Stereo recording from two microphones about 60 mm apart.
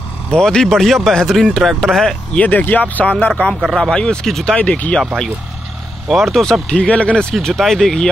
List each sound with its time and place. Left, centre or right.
0.3 s speech: centre
2.3 s speech: left
3.6 s speech: centre
3.9 s speech: centre
4.6 s speech: left
6.0 s speech: centre
7.3 s speech: centre